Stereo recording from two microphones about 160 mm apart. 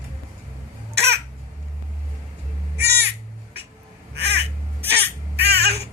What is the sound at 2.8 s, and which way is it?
Crow, 90° right.